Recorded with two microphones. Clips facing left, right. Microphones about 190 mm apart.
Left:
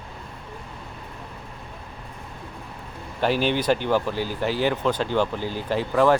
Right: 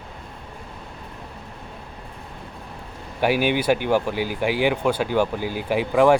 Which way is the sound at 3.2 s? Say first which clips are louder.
Right 2 dB; 10° right (ahead or behind).